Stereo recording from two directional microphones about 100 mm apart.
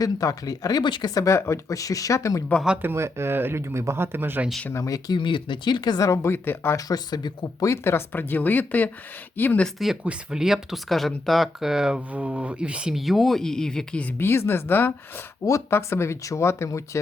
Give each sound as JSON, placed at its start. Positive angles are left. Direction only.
{"t": 0.0, "sound": "speech", "side_deg": 35}
{"t": 2.8, "sound": "speech", "side_deg": -25}
{"t": 4.7, "sound": "speech", "side_deg": 35}
{"t": 5.1, "sound": "speech", "side_deg": 55}
{"t": 6.3, "sound": "speech", "side_deg": 20}
{"t": 6.7, "sound": "speech", "side_deg": 40}
{"t": 7.7, "sound": "speech", "side_deg": 25}
{"t": 9.7, "sound": "speech", "side_deg": -5}
{"t": 14.2, "sound": "speech", "side_deg": 25}